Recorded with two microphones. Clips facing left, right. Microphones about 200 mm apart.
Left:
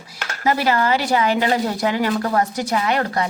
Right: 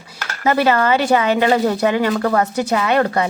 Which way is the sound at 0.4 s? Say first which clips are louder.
Right 3 dB; 60° right (ahead or behind).